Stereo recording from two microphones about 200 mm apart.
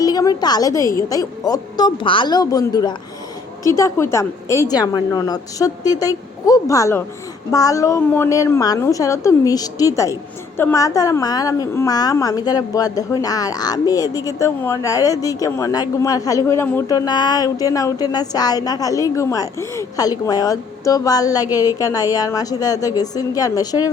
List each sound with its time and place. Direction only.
0.0 s a woman's voice: 20° left (ahead or behind)